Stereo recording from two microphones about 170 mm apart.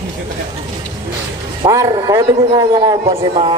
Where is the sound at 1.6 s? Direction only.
20° right (ahead or behind).